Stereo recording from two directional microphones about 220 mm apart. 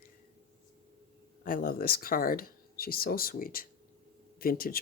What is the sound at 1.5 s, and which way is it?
Speech, 40° left (ahead or behind).